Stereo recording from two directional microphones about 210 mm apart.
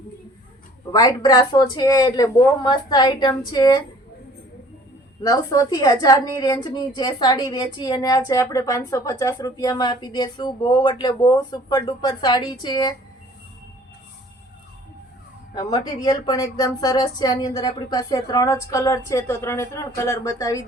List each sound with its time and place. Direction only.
0.9 s a woman's voice: 20° left (ahead or behind)
5.2 s a woman's voice: 15° left (ahead or behind)
15.5 s a woman's voice: 15° left (ahead or behind)